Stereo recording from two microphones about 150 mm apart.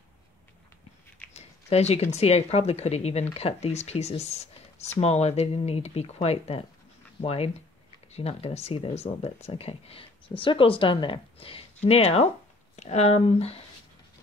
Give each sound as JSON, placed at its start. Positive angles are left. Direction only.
{"t": 1.3, "sound": "speech", "side_deg": 45}